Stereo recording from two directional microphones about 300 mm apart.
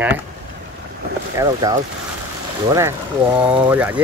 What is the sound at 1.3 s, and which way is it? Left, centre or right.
Speech, centre.